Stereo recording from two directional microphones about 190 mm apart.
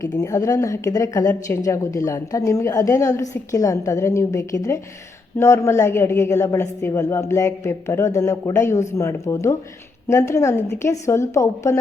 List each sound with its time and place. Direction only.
0.0 s speech: 15° left (ahead or behind)